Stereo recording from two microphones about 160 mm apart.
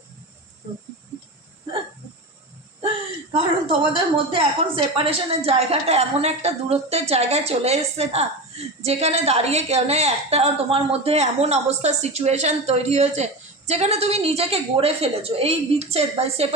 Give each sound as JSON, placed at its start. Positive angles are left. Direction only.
{"t": 3.3, "sound": "a woman's voice", "side_deg": -35}